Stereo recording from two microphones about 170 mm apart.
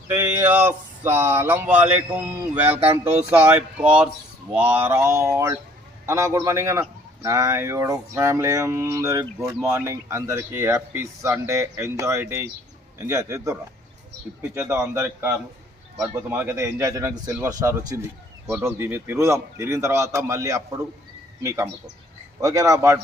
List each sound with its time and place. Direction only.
0.1 s a man's voice: 15° right (ahead or behind)